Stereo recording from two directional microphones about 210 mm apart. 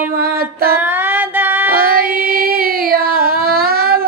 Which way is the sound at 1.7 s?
45° right (ahead or behind).